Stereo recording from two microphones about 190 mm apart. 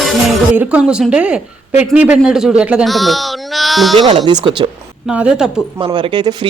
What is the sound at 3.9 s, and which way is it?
Speech, 25° right (ahead or behind).